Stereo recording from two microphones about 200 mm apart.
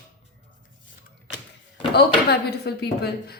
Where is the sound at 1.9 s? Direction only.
55° left (ahead or behind).